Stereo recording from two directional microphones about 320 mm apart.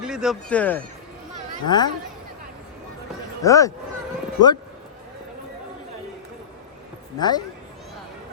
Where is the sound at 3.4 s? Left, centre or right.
Centre.